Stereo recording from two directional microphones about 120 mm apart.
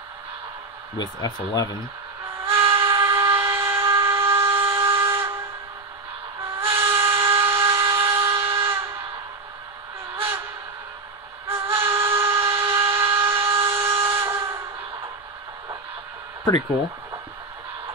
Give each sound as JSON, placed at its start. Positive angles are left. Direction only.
{"t": 0.9, "sound": "speech", "side_deg": 30}
{"t": 2.4, "sound": "steam whistle", "side_deg": -20}
{"t": 2.9, "sound": "train", "side_deg": -20}
{"t": 6.7, "sound": "a sound", "side_deg": -20}
{"t": 11.4, "sound": "steam whistle", "side_deg": -20}